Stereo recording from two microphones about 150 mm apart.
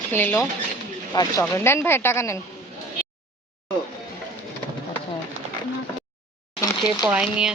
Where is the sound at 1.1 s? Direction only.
25° left (ahead or behind).